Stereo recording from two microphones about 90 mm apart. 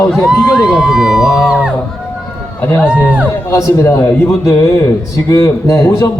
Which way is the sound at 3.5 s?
35° left (ahead or behind).